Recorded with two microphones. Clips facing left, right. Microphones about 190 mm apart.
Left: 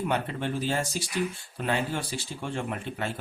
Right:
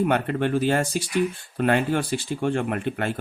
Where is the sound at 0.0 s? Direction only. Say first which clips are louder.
Right 7 dB; 60° right (ahead or behind).